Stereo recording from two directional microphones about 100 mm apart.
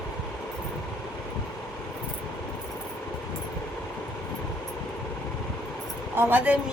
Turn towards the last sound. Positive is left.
turn(degrees=-20)  # may be behind; listen again after turning